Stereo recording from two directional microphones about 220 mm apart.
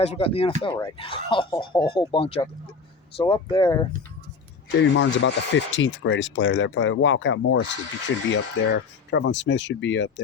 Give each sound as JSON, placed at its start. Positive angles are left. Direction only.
{"t": 0.0, "sound": "speech", "side_deg": 25}
{"t": 4.7, "sound": "speech", "side_deg": 55}